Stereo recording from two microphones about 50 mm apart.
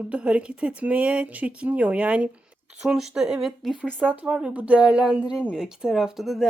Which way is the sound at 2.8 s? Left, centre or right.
Centre.